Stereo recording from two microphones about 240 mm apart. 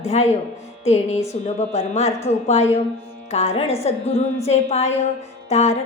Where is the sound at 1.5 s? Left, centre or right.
Left.